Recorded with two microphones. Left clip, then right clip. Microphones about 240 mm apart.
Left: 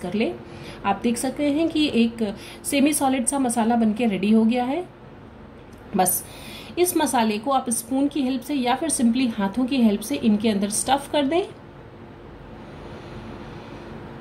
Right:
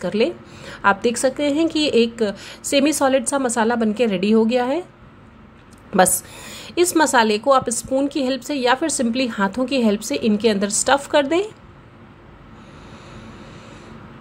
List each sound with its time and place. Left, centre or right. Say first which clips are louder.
0.0 s a woman's voice: right 6 dB; right
6.5 s a woman's voice: right 4 dB; right